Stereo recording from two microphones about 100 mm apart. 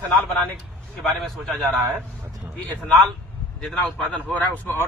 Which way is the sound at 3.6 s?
5° left (ahead or behind).